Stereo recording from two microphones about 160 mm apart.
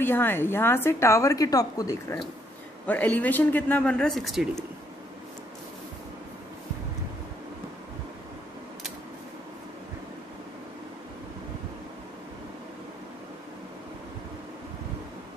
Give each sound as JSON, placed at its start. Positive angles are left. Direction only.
{"t": 0.0, "sound": "a woman's voice", "side_deg": 15}
{"t": 2.9, "sound": "a woman's voice", "side_deg": 10}